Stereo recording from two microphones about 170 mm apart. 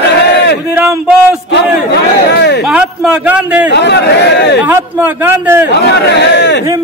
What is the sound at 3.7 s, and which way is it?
Speech, 80° left.